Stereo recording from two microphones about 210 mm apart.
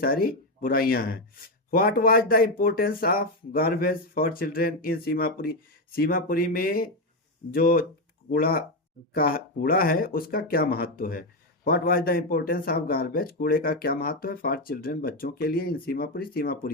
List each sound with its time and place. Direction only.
0.0 s speech: 45° left (ahead or behind)